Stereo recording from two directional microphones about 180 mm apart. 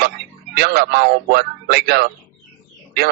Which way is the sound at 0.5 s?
65° right (ahead or behind).